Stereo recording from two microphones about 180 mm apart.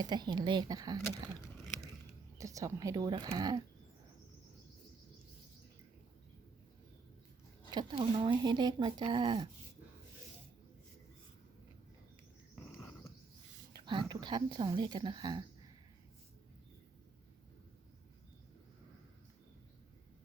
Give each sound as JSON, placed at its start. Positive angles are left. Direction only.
{"t": 0.0, "sound": "speech", "side_deg": -25}
{"t": 2.4, "sound": "speech", "side_deg": -20}
{"t": 7.7, "sound": "speech", "side_deg": -25}
{"t": 13.7, "sound": "speech", "side_deg": -25}